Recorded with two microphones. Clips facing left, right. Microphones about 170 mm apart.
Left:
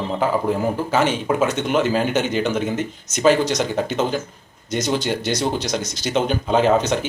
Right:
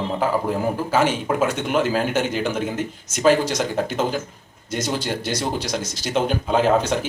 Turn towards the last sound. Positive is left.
turn(degrees=-5)  # may be behind; listen again after turning